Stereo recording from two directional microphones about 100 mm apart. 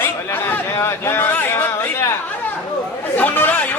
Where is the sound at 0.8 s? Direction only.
25° left (ahead or behind).